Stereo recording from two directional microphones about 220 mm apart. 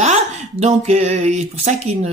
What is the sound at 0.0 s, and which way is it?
Speech, 30° right (ahead or behind).